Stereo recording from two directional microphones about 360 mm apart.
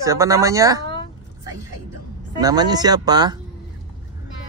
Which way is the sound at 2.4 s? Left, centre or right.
Centre.